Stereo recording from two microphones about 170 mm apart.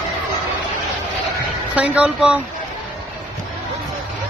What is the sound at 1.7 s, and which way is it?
Speech, 10° right (ahead or behind).